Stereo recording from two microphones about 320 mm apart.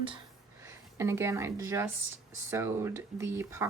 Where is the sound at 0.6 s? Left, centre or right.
Centre.